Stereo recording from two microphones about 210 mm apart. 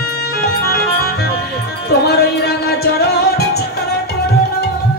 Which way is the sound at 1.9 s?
50° left (ahead or behind).